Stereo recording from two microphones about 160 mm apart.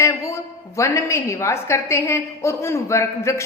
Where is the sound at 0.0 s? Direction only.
20° left (ahead or behind).